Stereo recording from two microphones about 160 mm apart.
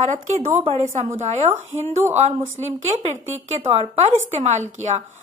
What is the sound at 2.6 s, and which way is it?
A woman's voice, 40° right (ahead or behind).